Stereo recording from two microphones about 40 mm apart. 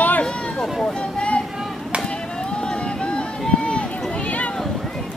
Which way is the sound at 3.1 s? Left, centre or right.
Left.